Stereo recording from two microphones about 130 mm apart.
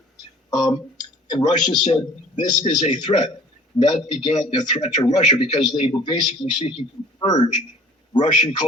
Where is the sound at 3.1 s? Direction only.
40° left (ahead or behind).